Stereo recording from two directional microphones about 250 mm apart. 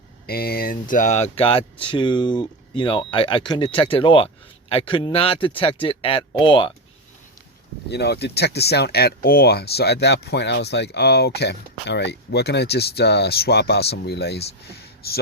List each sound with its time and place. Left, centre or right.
0.3 s speech: left; by 6.7 s centre
7.9 s speech: left